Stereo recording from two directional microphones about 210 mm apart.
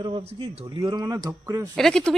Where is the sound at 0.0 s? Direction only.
25° right (ahead or behind).